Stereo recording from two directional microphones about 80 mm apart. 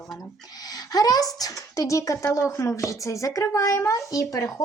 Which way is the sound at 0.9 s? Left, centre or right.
Left.